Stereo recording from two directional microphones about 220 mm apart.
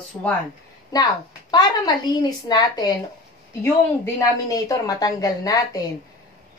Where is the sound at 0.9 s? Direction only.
20° left (ahead or behind).